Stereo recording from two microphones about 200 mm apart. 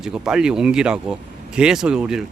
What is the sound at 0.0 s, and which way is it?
Speech, 5° right (ahead or behind).